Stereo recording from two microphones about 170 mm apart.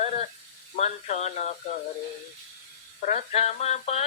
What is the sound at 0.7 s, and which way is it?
Speech, 40° left (ahead or behind).